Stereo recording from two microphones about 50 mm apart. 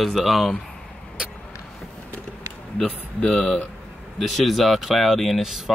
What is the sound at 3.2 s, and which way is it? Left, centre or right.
Speech, centre.